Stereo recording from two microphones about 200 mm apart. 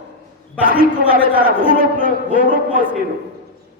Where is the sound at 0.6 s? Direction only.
45° right (ahead or behind).